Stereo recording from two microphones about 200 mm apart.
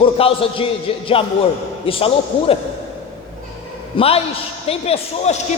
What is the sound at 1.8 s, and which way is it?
Speech, 30° left (ahead or behind).